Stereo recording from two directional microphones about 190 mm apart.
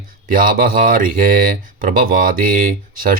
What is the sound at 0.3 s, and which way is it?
Speech, 45° right (ahead or behind).